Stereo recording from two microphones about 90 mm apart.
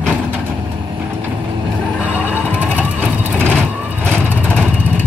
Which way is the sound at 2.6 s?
15° right (ahead or behind).